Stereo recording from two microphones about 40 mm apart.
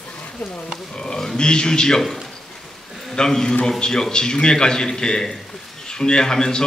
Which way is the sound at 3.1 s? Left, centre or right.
Centre.